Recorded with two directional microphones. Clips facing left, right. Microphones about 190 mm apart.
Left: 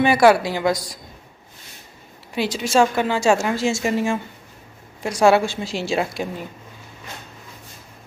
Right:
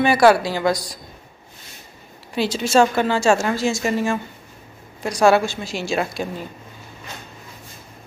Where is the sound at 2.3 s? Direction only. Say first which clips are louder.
Right 2 dB; 15° left (ahead or behind).